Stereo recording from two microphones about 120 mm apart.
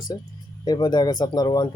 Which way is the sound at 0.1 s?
30° left (ahead or behind).